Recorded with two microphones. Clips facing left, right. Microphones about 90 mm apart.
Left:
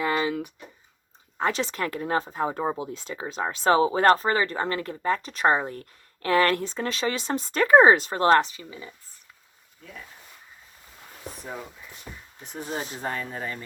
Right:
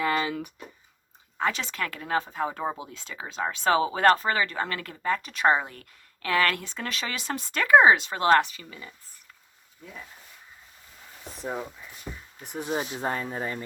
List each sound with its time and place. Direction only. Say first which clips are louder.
0.0 s a sound: left 1 dB; 20° left (ahead or behind)
1.4 s speech: left 2 dB; 35° left (ahead or behind)
8.7 s speech: left 3 dB; 10° left (ahead or behind)
12.4 s speech: right 3 dB; 15° right (ahead or behind)
12.9 s speech: right 2 dB; 25° right (ahead or behind)